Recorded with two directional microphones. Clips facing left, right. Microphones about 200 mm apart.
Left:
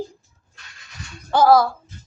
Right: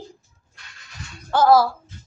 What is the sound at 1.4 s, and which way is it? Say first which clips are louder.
Speech: even; 5° right (ahead or behind).